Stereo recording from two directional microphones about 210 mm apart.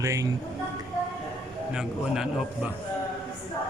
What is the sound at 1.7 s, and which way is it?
Speech, 5° right (ahead or behind).